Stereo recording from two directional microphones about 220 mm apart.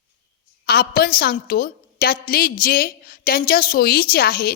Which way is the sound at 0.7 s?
45° left (ahead or behind).